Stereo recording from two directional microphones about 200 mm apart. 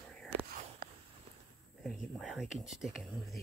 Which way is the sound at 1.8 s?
Centre (ahead or behind).